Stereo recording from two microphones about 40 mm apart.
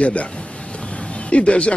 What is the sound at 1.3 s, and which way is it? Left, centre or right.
Speech, left.